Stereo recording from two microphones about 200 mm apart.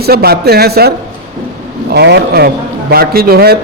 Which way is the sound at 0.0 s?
50° right (ahead or behind).